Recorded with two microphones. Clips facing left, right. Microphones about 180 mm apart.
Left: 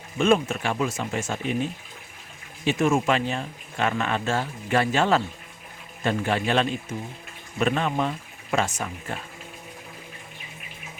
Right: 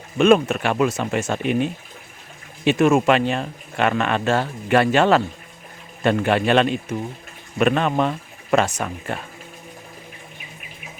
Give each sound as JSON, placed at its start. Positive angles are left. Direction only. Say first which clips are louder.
{"t": 0.2, "sound": "speech", "louder": "right 6 dB", "side_deg": -70}